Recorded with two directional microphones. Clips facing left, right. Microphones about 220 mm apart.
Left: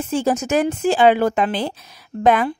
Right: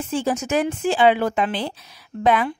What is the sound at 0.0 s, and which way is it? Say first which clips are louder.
Speech: left 3 dB; 40° left (ahead or behind).